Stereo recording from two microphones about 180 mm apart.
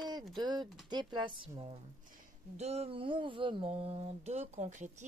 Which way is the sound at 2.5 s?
35° right (ahead or behind).